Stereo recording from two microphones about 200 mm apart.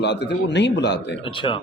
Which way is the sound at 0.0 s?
60° left (ahead or behind).